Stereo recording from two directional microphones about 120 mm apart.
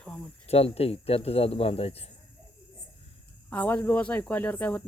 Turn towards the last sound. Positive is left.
turn(degrees=15)  # may be behind; listen again after turning